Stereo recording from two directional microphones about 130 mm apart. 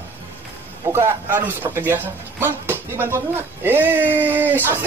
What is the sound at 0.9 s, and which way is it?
Speech, 15° right (ahead or behind).